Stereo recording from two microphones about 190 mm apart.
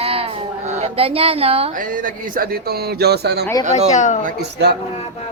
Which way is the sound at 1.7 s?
45° right (ahead or behind).